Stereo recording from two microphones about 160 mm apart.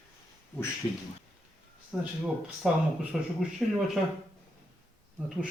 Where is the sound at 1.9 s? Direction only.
5° left (ahead or behind).